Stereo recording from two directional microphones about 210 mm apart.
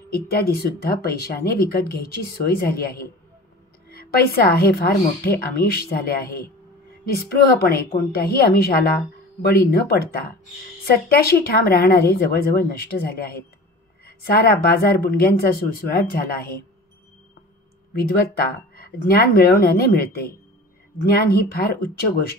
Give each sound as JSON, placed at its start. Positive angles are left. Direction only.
{"t": 0.1, "sound": "speech", "side_deg": 50}
{"t": 17.9, "sound": "speech", "side_deg": 45}